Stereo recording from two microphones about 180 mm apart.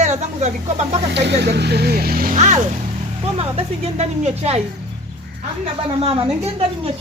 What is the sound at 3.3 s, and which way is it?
A woman's voice, 30° right (ahead or behind).